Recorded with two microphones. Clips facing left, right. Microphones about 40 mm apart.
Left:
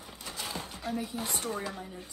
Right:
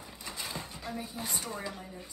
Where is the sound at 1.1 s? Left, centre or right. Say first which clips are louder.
Left 3 dB; left.